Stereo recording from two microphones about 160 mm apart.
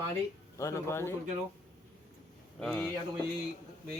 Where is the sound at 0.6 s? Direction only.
15° left (ahead or behind).